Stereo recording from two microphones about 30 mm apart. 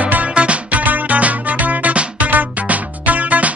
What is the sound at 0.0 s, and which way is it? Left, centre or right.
Music, right.